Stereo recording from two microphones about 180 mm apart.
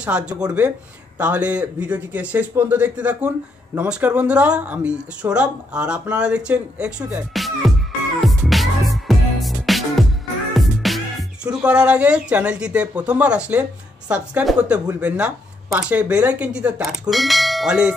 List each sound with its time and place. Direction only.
0.0 s speech: 5° right (ahead or behind)
8.2 s music: centre (ahead or behind)
10.5 s speech: centre (ahead or behind)